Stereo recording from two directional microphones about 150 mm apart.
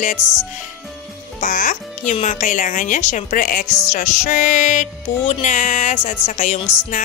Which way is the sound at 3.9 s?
55° left (ahead or behind).